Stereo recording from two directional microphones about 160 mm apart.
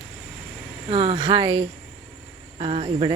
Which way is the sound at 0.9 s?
35° right (ahead or behind).